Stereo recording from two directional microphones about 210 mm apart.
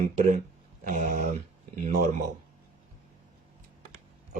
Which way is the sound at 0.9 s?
35° right (ahead or behind).